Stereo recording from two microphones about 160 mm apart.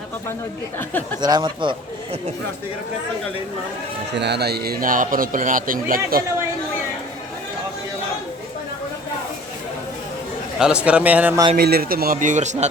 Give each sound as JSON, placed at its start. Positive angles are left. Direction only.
{"t": 1.2, "sound": "speech", "side_deg": -25}
{"t": 4.1, "sound": "speech", "side_deg": -90}
{"t": 10.6, "sound": "a man's voice", "side_deg": -5}
{"t": 11.5, "sound": "speech", "side_deg": -75}